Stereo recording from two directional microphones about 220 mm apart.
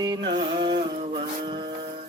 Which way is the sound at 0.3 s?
20° right (ahead or behind).